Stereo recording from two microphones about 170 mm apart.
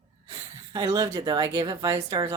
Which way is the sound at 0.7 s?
20° right (ahead or behind).